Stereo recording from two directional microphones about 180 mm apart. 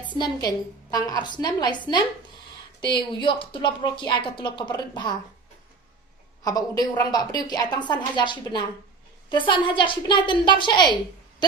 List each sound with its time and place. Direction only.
0.2 s speech: 20° left (ahead or behind)
6.4 s a woman's voice: 20° left (ahead or behind)